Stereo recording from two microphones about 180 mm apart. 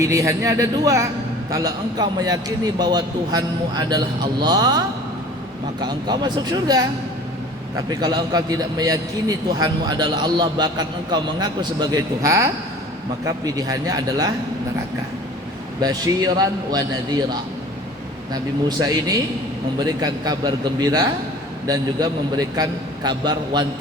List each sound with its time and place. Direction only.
0.0 s a man's voice: 15° right (ahead or behind)
5.8 s a man's voice: 25° right (ahead or behind)
7.9 s a man's voice: 25° right (ahead or behind)
15.8 s a man's voice: 20° right (ahead or behind)
18.8 s a man's voice: 20° right (ahead or behind)